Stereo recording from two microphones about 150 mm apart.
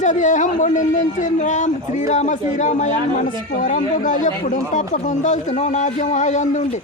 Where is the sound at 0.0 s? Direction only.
55° left (ahead or behind).